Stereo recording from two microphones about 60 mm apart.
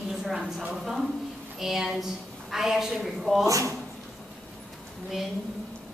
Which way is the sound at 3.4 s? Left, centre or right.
Right.